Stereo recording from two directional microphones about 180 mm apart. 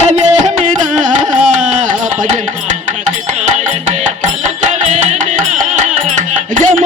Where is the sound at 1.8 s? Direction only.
45° right (ahead or behind).